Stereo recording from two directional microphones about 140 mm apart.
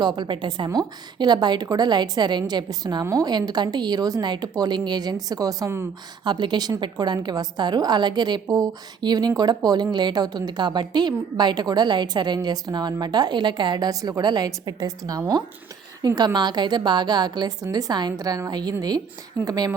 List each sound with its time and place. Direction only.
0.0 s a woman's voice: 35° right (ahead or behind)
6.2 s a woman's voice: 35° right (ahead or behind)